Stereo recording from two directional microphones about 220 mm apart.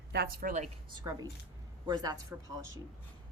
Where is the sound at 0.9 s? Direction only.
15° right (ahead or behind).